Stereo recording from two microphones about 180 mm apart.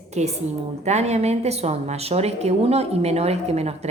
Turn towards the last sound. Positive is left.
turn(degrees=-35)  # may be behind; listen again after turning